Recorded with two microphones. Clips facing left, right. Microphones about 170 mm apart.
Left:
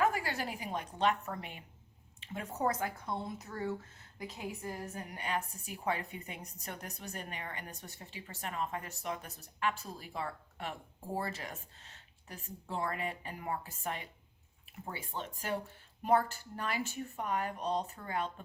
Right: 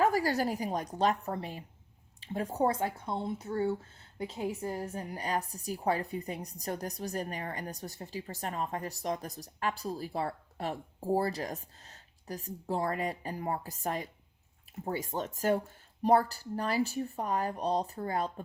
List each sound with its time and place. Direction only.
0.0 s speech: 35° right (ahead or behind)